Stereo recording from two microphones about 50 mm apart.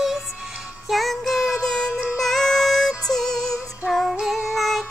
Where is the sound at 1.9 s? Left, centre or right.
Right.